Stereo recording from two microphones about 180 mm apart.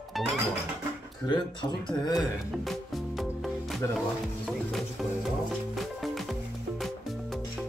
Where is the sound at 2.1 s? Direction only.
Centre (ahead or behind).